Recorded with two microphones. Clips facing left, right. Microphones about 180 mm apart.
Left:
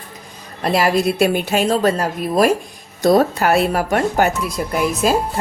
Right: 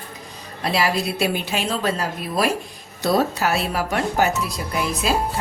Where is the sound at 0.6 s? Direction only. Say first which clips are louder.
Left 5 dB; 50° left (ahead or behind).